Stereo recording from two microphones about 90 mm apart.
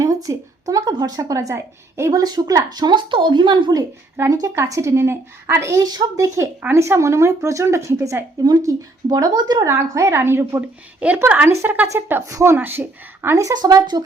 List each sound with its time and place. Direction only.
0.0 s speech: 40° right (ahead or behind)
2.1 s speech: 45° right (ahead or behind)
4.3 s a woman's voice: 40° right (ahead or behind)
9.6 s a woman's voice: 35° right (ahead or behind)
11.0 s a woman's voice: 15° right (ahead or behind)
11.4 s a woman's voice: 25° right (ahead or behind)
12.2 s a woman's voice: 35° right (ahead or behind)
12.5 s a woman's voice: 20° right (ahead or behind)
13.3 s a woman's voice: 40° right (ahead or behind)
13.6 s speech: 50° right (ahead or behind)